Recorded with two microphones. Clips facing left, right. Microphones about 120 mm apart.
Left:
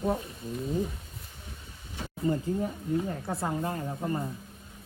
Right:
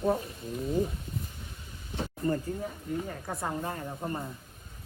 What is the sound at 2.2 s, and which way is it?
Speech, 5° left (ahead or behind).